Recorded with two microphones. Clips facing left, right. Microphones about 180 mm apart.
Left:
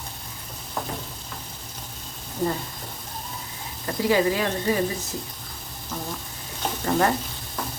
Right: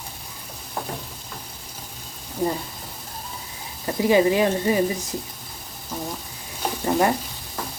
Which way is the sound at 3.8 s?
20° right (ahead or behind).